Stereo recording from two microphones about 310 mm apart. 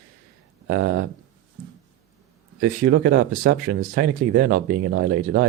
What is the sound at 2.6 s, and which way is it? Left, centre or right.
Speech, right.